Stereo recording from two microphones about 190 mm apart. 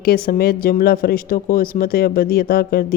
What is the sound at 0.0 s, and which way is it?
Speech, 55° left (ahead or behind).